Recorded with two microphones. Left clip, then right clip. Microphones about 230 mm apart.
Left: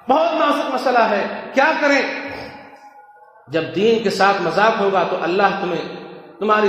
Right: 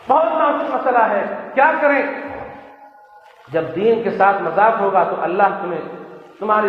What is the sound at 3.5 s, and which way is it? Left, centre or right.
A man's voice, left.